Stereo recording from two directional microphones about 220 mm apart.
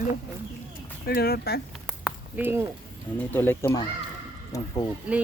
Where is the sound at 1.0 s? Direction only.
45° left (ahead or behind).